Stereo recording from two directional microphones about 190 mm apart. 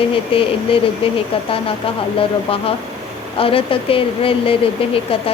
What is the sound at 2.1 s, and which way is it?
Speech, 30° left (ahead or behind).